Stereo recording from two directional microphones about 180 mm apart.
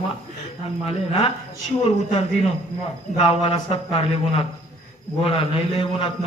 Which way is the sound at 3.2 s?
35° left (ahead or behind).